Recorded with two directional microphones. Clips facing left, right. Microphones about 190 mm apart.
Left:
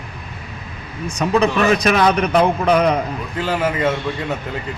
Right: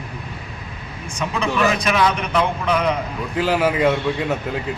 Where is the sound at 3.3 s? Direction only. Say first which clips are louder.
Right 2 dB; 10° right (ahead or behind).